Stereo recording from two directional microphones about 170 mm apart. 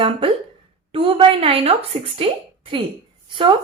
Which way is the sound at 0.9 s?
35° right (ahead or behind).